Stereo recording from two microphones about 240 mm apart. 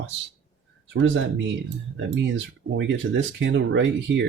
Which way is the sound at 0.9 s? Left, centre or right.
Right.